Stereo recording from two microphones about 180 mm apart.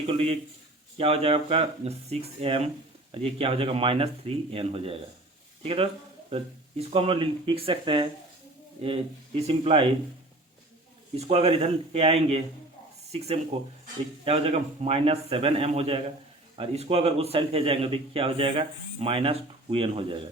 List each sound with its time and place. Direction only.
0.0 s a man's voice: 35° right (ahead or behind)
11.2 s a man's voice: 35° right (ahead or behind)